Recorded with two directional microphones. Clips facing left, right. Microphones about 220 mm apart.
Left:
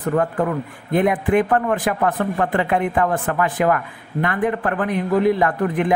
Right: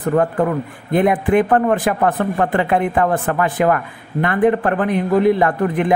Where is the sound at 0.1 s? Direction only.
40° right (ahead or behind).